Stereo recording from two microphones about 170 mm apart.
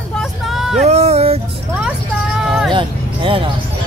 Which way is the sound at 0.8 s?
40° right (ahead or behind).